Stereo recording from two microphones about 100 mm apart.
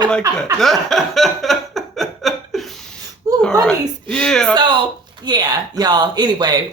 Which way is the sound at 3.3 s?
40° right (ahead or behind).